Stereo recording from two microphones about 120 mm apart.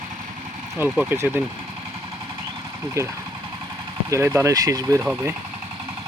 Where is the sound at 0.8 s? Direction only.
20° right (ahead or behind).